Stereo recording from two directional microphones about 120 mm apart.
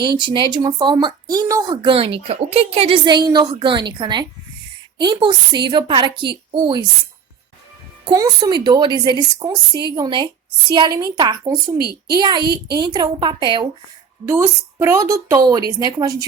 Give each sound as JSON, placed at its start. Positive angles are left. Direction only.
{"t": 0.1, "sound": "speech", "side_deg": -40}
{"t": 8.0, "sound": "speech", "side_deg": -35}
{"t": 14.3, "sound": "a woman's voice", "side_deg": -20}